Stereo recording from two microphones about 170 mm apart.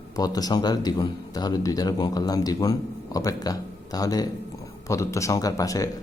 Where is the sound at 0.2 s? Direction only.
20° left (ahead or behind).